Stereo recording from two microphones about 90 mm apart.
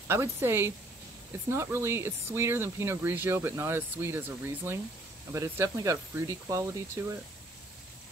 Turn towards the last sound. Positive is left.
turn(degrees=-30)  # may be behind; listen again after turning